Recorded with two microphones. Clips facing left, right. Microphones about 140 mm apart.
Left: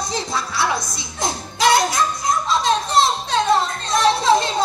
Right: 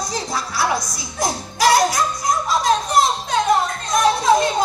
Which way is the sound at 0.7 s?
25° left (ahead or behind).